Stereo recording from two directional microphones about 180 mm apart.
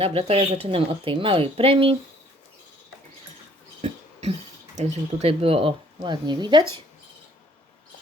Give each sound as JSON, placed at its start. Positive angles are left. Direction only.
{"t": 0.0, "sound": "a woman's voice", "side_deg": -30}
{"t": 3.8, "sound": "speech", "side_deg": -35}